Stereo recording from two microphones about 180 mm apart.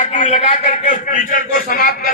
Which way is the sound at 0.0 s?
40° left (ahead or behind).